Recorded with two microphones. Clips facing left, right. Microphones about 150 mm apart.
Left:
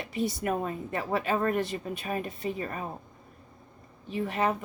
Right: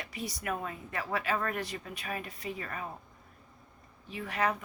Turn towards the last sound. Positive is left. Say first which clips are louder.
# left 4 dB
turn(degrees=25)  # may be behind; listen again after turning